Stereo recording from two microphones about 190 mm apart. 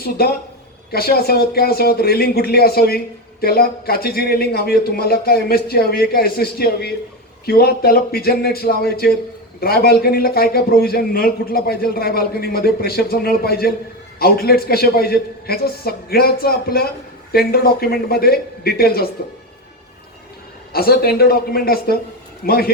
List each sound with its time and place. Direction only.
0.0 s a man's voice: 55° left (ahead or behind)
20.7 s a man's voice: 55° left (ahead or behind)